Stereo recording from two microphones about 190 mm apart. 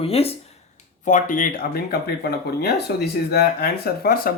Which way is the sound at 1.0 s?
45° left (ahead or behind).